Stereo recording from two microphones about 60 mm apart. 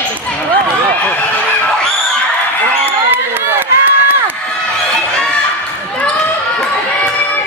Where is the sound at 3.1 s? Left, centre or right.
Right.